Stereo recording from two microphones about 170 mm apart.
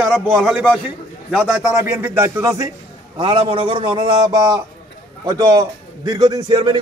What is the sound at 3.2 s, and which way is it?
A man's voice, 30° right (ahead or behind).